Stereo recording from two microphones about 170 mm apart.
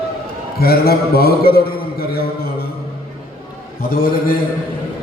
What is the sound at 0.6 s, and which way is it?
A man's voice, 65° left (ahead or behind).